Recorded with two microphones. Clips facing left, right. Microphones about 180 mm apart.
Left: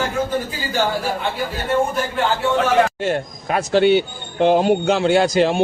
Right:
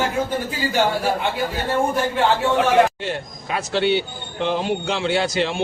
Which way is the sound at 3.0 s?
50° left (ahead or behind).